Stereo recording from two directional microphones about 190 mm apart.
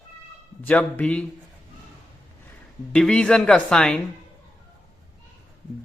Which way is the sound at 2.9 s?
5° left (ahead or behind).